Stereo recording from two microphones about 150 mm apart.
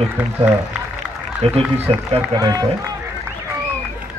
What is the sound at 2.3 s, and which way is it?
Speech, 25° right (ahead or behind).